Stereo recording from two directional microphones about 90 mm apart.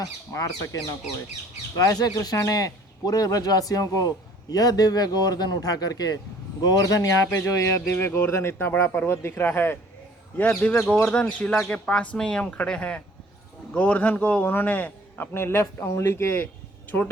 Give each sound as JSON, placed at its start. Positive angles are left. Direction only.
{"t": 0.0, "sound": "a man's voice", "side_deg": 40}
{"t": 10.8, "sound": "speech", "side_deg": 0}
{"t": 11.1, "sound": "a man's voice", "side_deg": 15}